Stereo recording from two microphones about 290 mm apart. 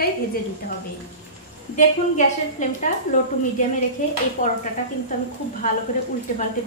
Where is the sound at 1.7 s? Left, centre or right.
Left.